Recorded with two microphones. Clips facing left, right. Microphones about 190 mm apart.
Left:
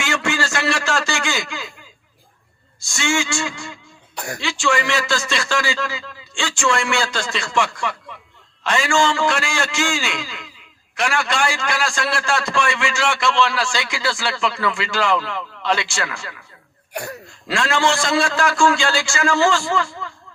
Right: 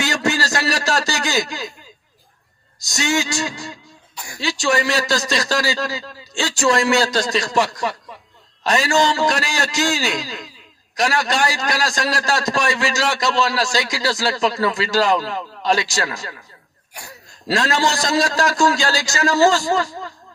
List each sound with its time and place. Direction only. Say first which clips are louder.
0.0 s a sound: right 2 dB; 40° right (ahead or behind)
2.8 s a man's voice: right 1 dB; 40° right (ahead or behind)
4.1 s throat clearing: left 8 dB; 65° left (ahead or behind)
4.4 s a man's voice: right 2 dB; 40° right (ahead or behind)
16.9 s throat clearing: left 11 dB; 65° left (ahead or behind)
17.5 s a man's voice: even; 40° right (ahead or behind)